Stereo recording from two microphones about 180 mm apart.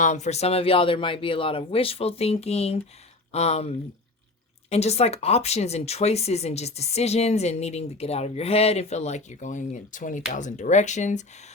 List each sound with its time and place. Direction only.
0.0 s speech: 40° left (ahead or behind)